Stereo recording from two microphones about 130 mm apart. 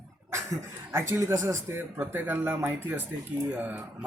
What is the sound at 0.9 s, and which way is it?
Speech, 20° right (ahead or behind).